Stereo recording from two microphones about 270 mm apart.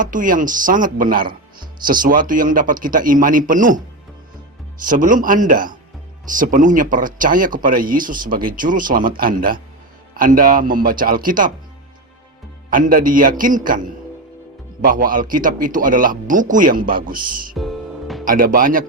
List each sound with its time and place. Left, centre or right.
0.0 s a man's voice: right
4.9 s a man's voice: right
12.7 s a man's voice: right
17.6 s music: centre
18.3 s a man's voice: right